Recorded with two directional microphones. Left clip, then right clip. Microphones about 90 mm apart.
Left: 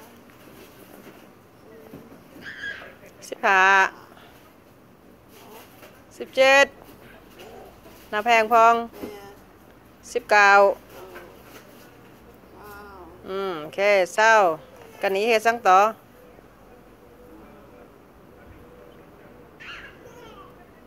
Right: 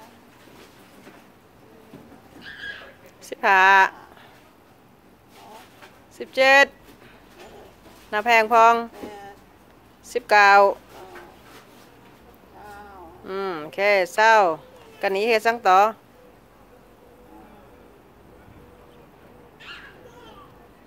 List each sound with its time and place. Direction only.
3.3 s a woman's voice: 55° right (ahead or behind)
6.1 s speech: 50° right (ahead or behind)
8.1 s speech: 55° right (ahead or behind)
10.0 s speech: 50° right (ahead or behind)
13.2 s speech: 60° right (ahead or behind)